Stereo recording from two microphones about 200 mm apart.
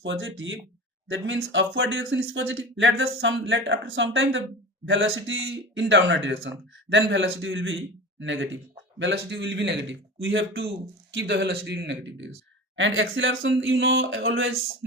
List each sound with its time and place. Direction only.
0.0 s a man's voice: 70° right (ahead or behind)
11.1 s speech: 65° right (ahead or behind); by 14.6 s 80° right